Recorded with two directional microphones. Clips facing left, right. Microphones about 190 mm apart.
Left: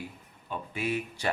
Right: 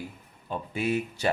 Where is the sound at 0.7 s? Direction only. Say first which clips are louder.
Right 4 dB; 40° right (ahead or behind).